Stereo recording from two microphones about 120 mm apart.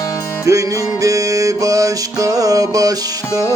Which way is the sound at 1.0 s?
30° right (ahead or behind).